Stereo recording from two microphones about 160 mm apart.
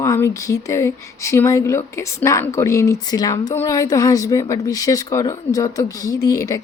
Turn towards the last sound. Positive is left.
turn(degrees=20)  # may be behind; listen again after turning